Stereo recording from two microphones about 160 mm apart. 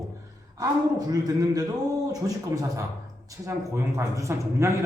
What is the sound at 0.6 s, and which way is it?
A man's voice, 25° right (ahead or behind).